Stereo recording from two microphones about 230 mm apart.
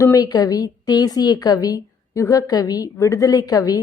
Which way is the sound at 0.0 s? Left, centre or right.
Centre.